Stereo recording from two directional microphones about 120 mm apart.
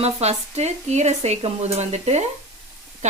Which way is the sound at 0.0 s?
65° right (ahead or behind).